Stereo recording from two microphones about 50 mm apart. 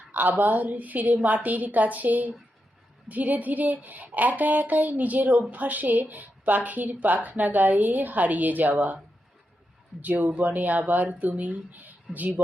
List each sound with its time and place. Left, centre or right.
0.1 s speech: right
10.0 s speech: right